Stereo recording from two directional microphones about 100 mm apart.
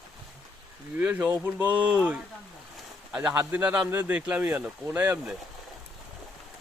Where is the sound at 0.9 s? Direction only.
20° right (ahead or behind).